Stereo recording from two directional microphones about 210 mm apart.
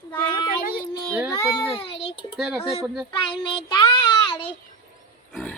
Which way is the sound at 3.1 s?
25° left (ahead or behind).